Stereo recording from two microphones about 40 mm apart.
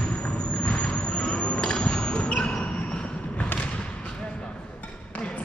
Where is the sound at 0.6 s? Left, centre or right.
Left.